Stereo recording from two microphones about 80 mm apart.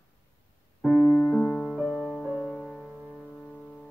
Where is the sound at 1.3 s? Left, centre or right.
Centre.